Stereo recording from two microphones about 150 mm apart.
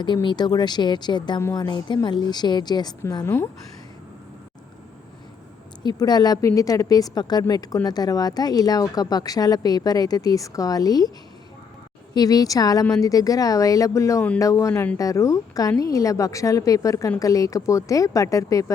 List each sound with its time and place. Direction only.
0.0 s speech: 30° left (ahead or behind)
1.4 s speech: 15° left (ahead or behind)
1.6 s speech: 30° left (ahead or behind)
3.2 s speech: 15° left (ahead or behind)
5.8 s speech: 30° left (ahead or behind)
12.1 s speech: 25° left (ahead or behind)